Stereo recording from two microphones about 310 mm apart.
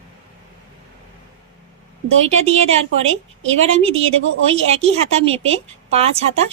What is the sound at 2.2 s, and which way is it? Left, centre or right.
A woman's voice, right.